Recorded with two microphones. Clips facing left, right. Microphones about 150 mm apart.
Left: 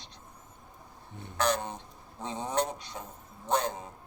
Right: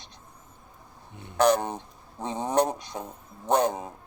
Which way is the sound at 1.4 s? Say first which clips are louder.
Right 8 dB; 55° right (ahead or behind).